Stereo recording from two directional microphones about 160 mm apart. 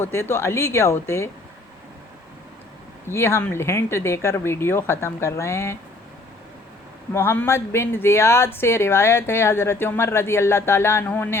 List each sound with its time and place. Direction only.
0.0 s a woman's voice: 15° left (ahead or behind)
3.1 s a woman's voice: 15° left (ahead or behind)
7.1 s a woman's voice: 15° left (ahead or behind)